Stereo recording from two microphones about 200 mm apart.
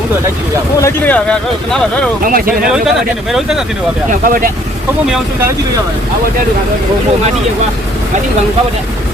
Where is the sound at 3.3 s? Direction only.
Centre (ahead or behind).